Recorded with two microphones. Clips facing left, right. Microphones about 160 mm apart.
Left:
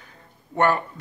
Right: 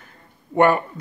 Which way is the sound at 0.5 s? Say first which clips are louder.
Right 4 dB; 15° right (ahead or behind).